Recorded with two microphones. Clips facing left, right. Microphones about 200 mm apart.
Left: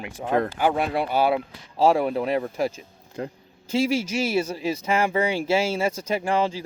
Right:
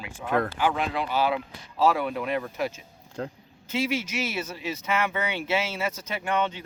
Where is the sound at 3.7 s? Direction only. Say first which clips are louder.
Left 5 dB; 30° left (ahead or behind).